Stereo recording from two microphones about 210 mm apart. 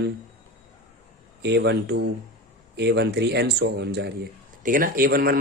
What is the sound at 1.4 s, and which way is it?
Speech, 55° right (ahead or behind).